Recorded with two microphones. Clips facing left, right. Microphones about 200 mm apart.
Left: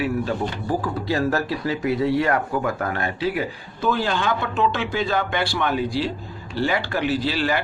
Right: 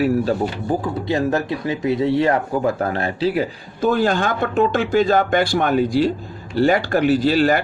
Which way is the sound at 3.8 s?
45° right (ahead or behind).